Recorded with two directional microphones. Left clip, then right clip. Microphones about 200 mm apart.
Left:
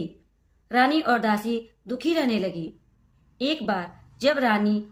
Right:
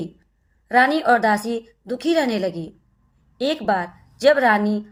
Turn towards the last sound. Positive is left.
turn(degrees=-35)  # may be behind; listen again after turning